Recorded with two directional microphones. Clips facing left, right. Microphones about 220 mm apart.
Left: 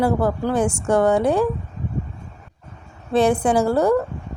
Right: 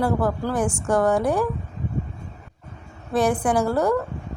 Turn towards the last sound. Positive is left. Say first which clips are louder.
# left 3 dB
turn(degrees=25)  # may be behind; listen again after turning